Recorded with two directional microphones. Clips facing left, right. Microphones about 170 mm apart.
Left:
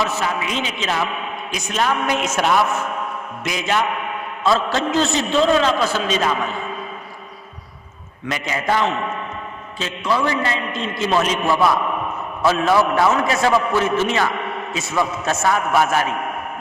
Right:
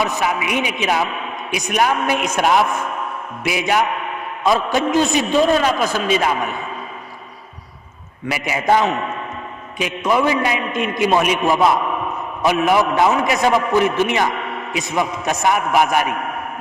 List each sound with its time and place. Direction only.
0.0 s a man's voice: 15° right (ahead or behind)
4.4 s a man's voice: 15° right (ahead or behind)
8.3 s a man's voice: 10° right (ahead or behind)
10.1 s a man's voice: 15° right (ahead or behind)